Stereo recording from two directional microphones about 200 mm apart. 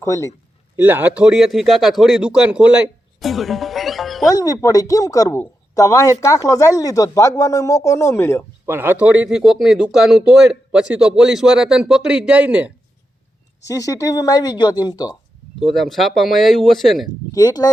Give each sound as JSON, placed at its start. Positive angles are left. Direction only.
{"t": 0.0, "sound": "speech", "side_deg": 15}
{"t": 0.8, "sound": "speech", "side_deg": -10}
{"t": 3.2, "sound": "music", "side_deg": 0}
{"t": 4.3, "sound": "speech", "side_deg": 15}
{"t": 8.6, "sound": "speech", "side_deg": -10}
{"t": 13.7, "sound": "speech", "side_deg": 15}
{"t": 15.6, "sound": "speech", "side_deg": 0}
{"t": 17.3, "sound": "speech", "side_deg": 20}